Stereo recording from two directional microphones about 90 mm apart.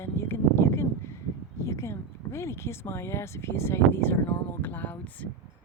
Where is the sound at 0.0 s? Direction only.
25° left (ahead or behind).